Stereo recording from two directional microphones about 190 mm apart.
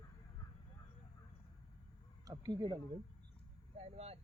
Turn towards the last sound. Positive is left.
turn(degrees=-35)  # may be behind; listen again after turning